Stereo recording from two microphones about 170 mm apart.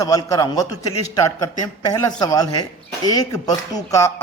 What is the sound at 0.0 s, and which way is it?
A man's voice, 20° left (ahead or behind).